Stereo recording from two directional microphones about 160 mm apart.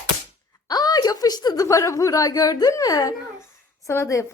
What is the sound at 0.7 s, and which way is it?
A woman's voice, 25° left (ahead or behind).